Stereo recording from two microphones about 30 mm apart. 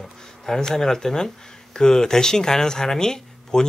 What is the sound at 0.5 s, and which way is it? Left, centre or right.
Speech, centre.